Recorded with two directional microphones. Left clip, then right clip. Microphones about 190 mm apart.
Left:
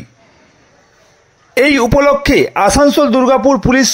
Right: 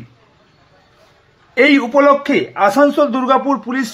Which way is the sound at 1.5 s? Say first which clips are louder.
Left 1 dB; 45° left (ahead or behind).